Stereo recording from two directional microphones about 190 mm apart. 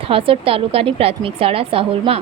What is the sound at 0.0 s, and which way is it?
A woman's voice, 30° right (ahead or behind).